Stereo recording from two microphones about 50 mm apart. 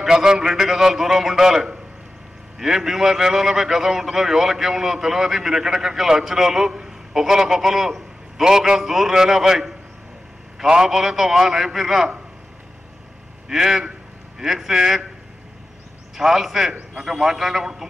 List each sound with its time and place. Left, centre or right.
0.0 s a man's voice: centre
13.5 s a man's voice: centre
16.2 s a man's voice: centre